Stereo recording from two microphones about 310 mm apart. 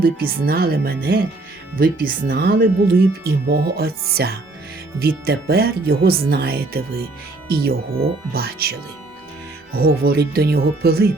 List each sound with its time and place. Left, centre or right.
0.0 s speech: right
9.7 s speech: right